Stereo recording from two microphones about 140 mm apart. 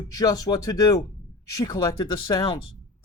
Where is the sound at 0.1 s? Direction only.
25° left (ahead or behind).